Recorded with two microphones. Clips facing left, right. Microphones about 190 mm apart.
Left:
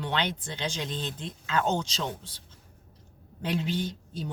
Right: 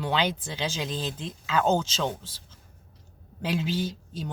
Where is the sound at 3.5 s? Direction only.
5° right (ahead or behind).